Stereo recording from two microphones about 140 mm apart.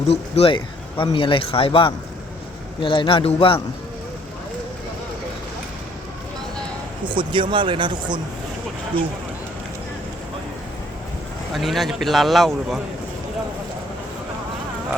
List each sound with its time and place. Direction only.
0.1 s speech: 45° left (ahead or behind)
7.0 s speech: 35° right (ahead or behind)
11.5 s a man's voice: centre (ahead or behind)